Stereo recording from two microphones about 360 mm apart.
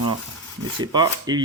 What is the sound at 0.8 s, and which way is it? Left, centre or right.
Speech, centre.